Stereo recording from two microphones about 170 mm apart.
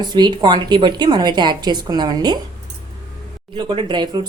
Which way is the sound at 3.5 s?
30° right (ahead or behind).